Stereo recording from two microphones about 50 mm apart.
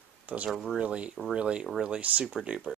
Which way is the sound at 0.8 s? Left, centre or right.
Right.